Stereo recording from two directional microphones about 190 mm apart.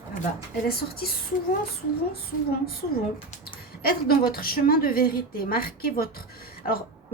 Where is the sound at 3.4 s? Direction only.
50° left (ahead or behind).